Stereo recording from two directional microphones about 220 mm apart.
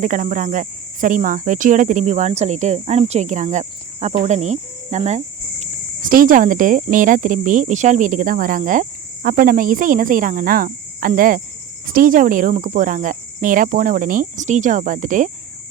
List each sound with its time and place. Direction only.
0.0 s speech: 35° right (ahead or behind)